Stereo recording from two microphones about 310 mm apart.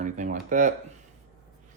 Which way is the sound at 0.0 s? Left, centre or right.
Right.